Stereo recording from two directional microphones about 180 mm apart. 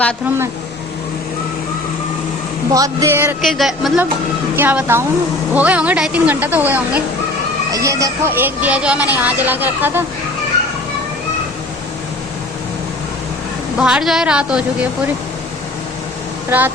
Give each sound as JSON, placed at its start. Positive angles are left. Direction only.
{"t": 2.7, "sound": "speech", "side_deg": -20}
{"t": 3.4, "sound": "speech", "side_deg": 0}
{"t": 13.7, "sound": "speech", "side_deg": -5}
{"t": 16.5, "sound": "speech", "side_deg": -10}